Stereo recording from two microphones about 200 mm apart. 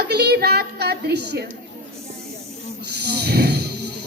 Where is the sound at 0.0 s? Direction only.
55° right (ahead or behind).